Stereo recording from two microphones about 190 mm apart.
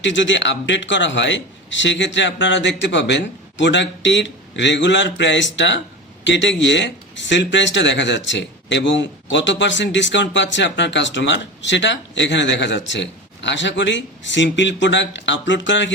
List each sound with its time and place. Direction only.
0.0 s speech: 70° left (ahead or behind)